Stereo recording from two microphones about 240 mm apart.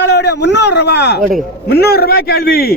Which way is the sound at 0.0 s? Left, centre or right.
Left.